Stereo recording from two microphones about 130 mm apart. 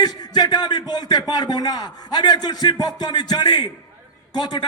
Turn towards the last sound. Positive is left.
turn(degrees=35)  # may be behind; listen again after turning